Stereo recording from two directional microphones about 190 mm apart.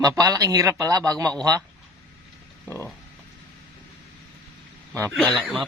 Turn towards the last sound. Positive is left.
turn(degrees=0)  # may be behind; listen again after turning